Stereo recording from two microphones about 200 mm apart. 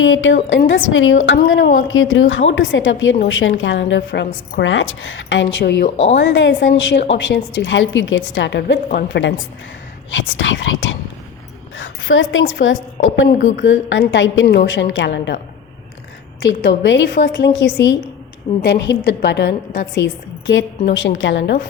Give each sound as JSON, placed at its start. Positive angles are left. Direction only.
{"t": 0.0, "sound": "speech", "side_deg": 75}
{"t": 4.6, "sound": "a woman's voice", "side_deg": 75}
{"t": 10.1, "sound": "a woman's voice", "side_deg": 70}
{"t": 16.4, "sound": "a woman's voice", "side_deg": 60}